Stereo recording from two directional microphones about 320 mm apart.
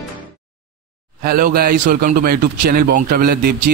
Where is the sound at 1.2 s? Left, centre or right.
Right.